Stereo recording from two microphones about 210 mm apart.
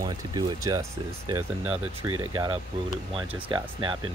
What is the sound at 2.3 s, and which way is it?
Speech, 20° right (ahead or behind).